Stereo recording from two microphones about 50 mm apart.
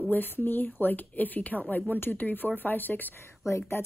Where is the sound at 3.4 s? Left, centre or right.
Left.